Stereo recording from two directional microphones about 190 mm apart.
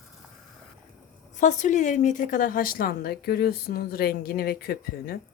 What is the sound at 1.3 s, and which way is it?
A woman's voice, 40° left (ahead or behind).